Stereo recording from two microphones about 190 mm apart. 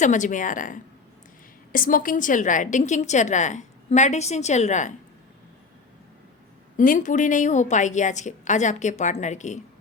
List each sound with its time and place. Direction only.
0.0 s a woman's voice: 40° left (ahead or behind)
6.7 s a woman's voice: 45° left (ahead or behind)